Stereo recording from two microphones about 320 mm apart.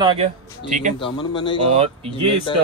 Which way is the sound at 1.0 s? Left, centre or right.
Centre.